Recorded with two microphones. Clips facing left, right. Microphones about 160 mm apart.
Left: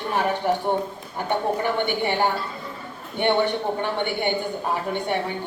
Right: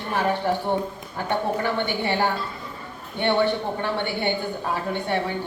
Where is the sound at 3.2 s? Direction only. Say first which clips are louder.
Even; 15° left (ahead or behind).